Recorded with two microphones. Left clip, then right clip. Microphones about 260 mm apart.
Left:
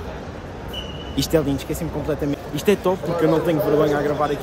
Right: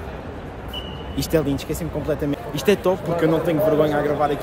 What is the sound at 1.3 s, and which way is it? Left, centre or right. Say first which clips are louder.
A man's voice: even; centre.